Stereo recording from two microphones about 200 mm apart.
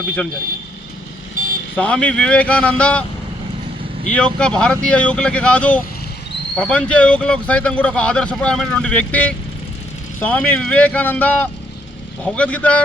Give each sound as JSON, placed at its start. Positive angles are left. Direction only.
{"t": 1.7, "sound": "speech", "side_deg": 5}
{"t": 4.0, "sound": "speech", "side_deg": 5}